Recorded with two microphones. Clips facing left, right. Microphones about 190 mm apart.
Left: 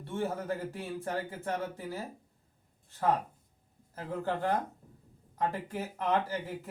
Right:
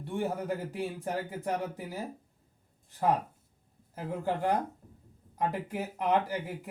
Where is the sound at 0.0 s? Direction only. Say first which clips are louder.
Right 2 dB; 15° right (ahead or behind).